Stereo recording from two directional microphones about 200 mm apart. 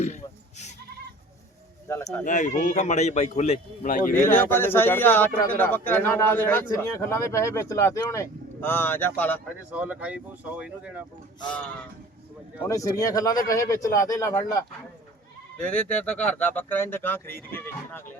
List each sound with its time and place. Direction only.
2.2 s speech: 40° left (ahead or behind)
4.1 s speech: 10° left (ahead or behind)
9.7 s speech: 5° right (ahead or behind)
12.6 s speech: 15° left (ahead or behind)
15.6 s speech: 5° left (ahead or behind)